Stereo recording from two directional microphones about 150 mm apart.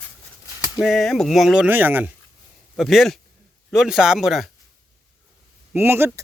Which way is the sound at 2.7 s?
Centre (ahead or behind).